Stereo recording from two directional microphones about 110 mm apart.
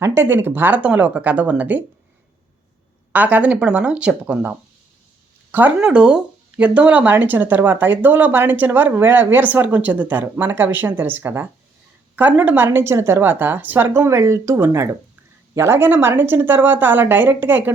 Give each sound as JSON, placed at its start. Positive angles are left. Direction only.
{"t": 0.0, "sound": "speech", "side_deg": -20}
{"t": 3.1, "sound": "a woman's voice", "side_deg": -15}